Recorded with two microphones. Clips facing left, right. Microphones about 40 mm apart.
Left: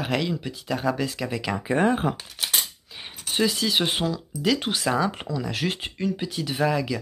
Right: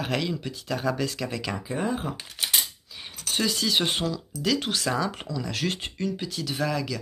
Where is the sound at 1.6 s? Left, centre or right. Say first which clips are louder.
Left 8 dB; left.